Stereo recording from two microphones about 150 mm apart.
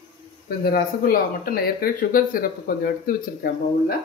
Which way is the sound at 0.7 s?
80° left.